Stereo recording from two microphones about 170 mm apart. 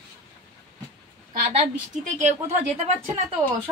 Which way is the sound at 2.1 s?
40° right (ahead or behind).